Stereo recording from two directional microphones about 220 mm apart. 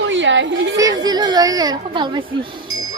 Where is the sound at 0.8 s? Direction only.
15° right (ahead or behind).